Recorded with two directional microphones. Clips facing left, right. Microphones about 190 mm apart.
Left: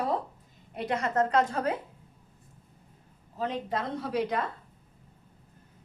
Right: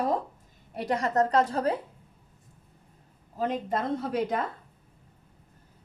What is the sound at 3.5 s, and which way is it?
Speech, 50° right (ahead or behind).